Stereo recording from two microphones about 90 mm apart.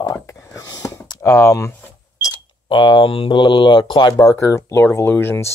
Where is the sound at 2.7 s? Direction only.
65° left (ahead or behind).